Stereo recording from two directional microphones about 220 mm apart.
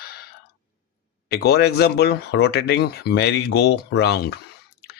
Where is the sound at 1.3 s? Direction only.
45° left (ahead or behind).